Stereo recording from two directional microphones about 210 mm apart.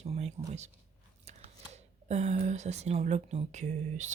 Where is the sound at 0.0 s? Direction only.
30° right (ahead or behind).